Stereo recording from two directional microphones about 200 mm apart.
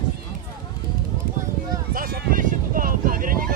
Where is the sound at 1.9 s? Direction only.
45° right (ahead or behind).